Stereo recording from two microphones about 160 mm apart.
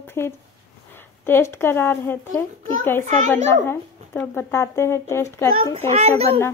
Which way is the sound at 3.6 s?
15° left (ahead or behind).